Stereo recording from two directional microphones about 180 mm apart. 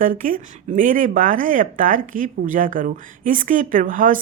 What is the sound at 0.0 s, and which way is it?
A woman's voice, 50° right (ahead or behind).